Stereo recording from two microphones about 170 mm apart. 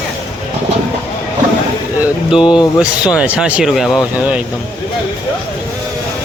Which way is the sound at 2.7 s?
5° right (ahead or behind).